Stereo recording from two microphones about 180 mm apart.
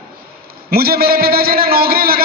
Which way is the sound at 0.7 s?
55° right (ahead or behind).